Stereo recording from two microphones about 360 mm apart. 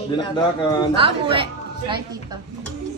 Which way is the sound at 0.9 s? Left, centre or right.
Centre.